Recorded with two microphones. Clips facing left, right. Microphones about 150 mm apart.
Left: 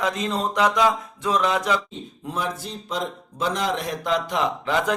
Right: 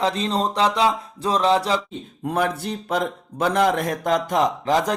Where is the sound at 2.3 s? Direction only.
65° right (ahead or behind).